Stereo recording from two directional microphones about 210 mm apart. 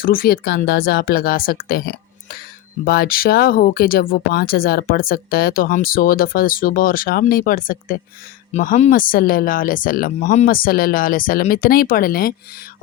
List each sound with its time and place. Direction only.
0.0 s speech: 45° left (ahead or behind)